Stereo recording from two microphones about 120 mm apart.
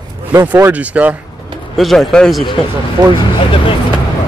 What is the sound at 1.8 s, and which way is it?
Speech, centre (ahead or behind).